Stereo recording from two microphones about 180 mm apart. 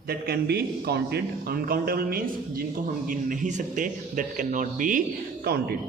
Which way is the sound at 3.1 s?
45° right (ahead or behind).